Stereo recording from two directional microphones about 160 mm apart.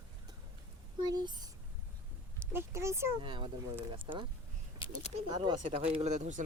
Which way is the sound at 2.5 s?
15° right (ahead or behind).